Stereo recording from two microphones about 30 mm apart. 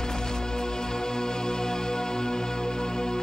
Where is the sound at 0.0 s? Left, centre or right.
Left.